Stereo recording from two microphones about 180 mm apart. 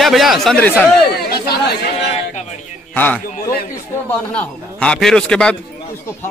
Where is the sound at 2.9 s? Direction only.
10° left (ahead or behind).